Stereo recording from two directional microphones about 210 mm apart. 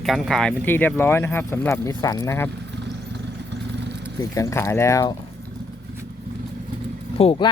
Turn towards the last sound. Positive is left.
turn(degrees=30)  # may be behind; listen again after turning